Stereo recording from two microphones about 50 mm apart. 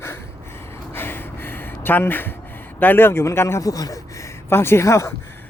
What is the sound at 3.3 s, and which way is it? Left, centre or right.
Speech, left.